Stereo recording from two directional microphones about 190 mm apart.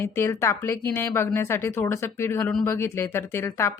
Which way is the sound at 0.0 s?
15° left (ahead or behind).